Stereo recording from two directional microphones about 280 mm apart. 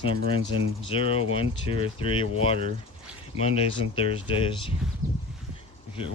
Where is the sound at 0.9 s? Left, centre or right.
Centre.